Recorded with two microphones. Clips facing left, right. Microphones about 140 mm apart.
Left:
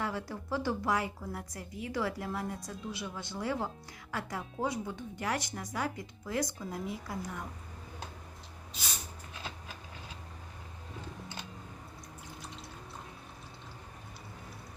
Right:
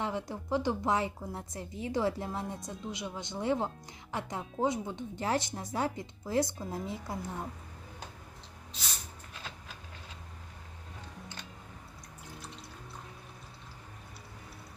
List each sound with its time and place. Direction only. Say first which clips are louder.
0.0 s a woman's voice: right 1 dB; 20° right (ahead or behind)